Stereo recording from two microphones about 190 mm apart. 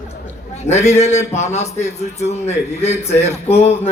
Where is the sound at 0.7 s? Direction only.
35° left (ahead or behind).